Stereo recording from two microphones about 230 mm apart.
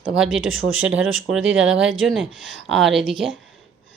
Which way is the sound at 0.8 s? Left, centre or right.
Centre.